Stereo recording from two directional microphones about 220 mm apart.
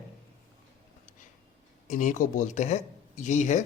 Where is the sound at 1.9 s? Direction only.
35° left (ahead or behind).